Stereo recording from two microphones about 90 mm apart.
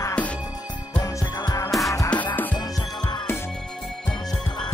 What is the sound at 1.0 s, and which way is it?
Music, 45° left (ahead or behind).